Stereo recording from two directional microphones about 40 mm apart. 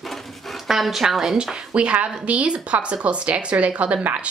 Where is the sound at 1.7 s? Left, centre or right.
Right.